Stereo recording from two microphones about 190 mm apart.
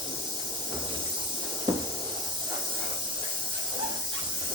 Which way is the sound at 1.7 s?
20° right (ahead or behind).